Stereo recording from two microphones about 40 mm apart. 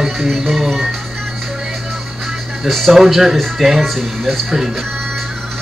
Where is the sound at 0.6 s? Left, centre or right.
Centre.